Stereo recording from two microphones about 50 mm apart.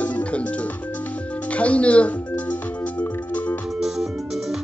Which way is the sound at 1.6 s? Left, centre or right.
Left.